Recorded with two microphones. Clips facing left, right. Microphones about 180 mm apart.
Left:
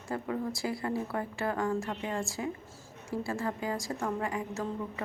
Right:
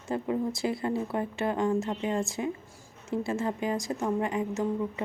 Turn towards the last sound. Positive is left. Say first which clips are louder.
# right 5 dB
turn(degrees=-20)  # may be behind; listen again after turning